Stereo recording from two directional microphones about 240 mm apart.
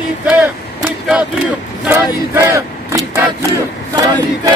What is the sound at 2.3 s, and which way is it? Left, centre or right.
Vehicle, centre.